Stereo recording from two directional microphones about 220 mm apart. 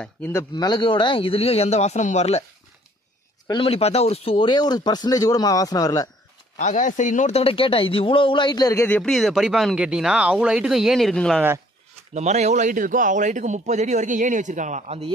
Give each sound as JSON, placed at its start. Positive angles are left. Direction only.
{"t": 0.0, "sound": "speech", "side_deg": 10}
{"t": 3.4, "sound": "speech", "side_deg": 25}
{"t": 6.5, "sound": "speech", "side_deg": 35}
{"t": 12.1, "sound": "speech", "side_deg": -30}